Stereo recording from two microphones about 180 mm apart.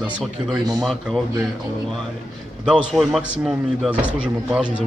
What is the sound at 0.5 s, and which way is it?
Speech, 20° right (ahead or behind).